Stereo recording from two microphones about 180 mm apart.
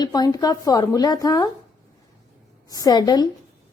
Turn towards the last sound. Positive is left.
turn(degrees=20)  # may be behind; listen again after turning